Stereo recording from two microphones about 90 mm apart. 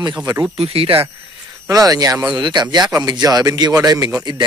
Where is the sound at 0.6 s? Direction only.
90° right.